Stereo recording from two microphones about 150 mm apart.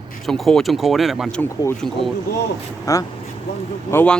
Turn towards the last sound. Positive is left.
turn(degrees=10)  # may be behind; listen again after turning